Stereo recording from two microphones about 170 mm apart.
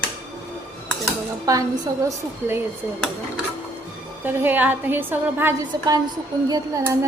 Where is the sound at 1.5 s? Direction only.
20° right (ahead or behind).